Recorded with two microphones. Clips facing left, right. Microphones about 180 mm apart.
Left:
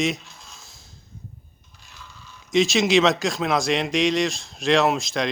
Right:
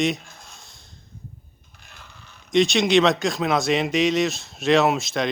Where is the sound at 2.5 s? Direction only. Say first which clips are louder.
Right 1 dB; centre (ahead or behind).